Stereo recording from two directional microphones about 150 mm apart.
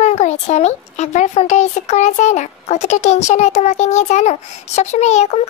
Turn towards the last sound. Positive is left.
turn(degrees=45)  # may be behind; listen again after turning